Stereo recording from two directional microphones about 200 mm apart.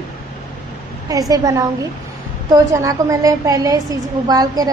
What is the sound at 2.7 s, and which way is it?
A woman's voice, 15° right (ahead or behind).